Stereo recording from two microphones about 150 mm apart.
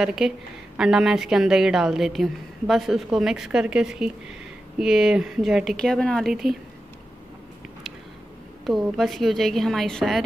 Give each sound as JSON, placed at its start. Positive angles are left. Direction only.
{"t": 0.0, "sound": "a woman's voice", "side_deg": -5}
{"t": 8.6, "sound": "a woman's voice", "side_deg": 0}